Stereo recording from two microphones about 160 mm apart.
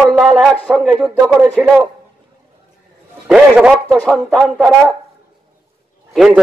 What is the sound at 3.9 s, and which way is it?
Speech, 10° left (ahead or behind).